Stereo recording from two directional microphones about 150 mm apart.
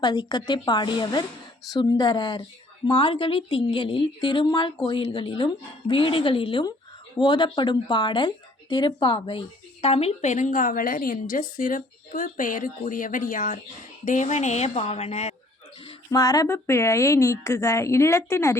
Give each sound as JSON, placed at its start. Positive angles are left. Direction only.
{"t": 0.0, "sound": "a woman's voice", "side_deg": 30}
{"t": 16.1, "sound": "a woman's voice", "side_deg": 25}